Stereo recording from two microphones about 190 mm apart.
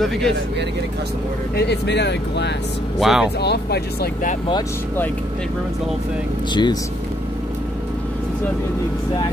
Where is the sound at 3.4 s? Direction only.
60° left (ahead or behind).